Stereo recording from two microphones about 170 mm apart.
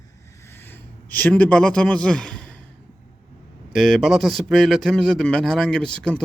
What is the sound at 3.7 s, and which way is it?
A man's voice, centre (ahead or behind).